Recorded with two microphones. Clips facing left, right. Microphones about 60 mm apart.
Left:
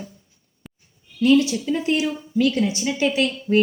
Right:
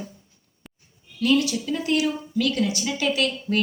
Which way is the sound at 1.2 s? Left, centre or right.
Left.